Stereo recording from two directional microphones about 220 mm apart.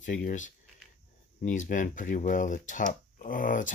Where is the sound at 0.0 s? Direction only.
35° left (ahead or behind).